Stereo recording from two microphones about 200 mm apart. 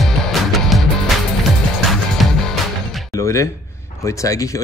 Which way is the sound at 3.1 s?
15° left (ahead or behind).